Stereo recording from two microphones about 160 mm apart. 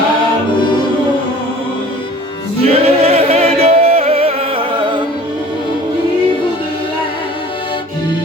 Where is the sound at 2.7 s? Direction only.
40° right (ahead or behind).